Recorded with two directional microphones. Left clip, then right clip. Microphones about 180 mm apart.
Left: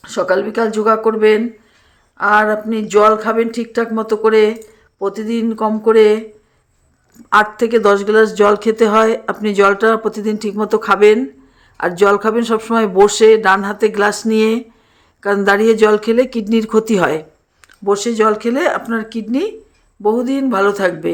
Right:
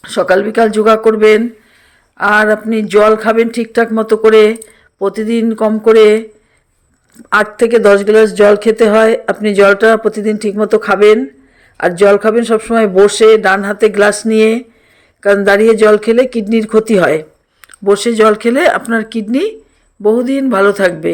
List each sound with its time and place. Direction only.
0.0 s a man's voice: 20° right (ahead or behind)
7.3 s speech: 15° right (ahead or behind)